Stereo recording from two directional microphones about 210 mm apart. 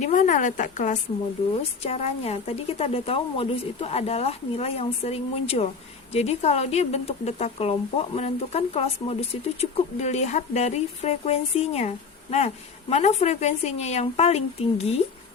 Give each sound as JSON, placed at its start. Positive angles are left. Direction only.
{"t": 0.0, "sound": "speech", "side_deg": 35}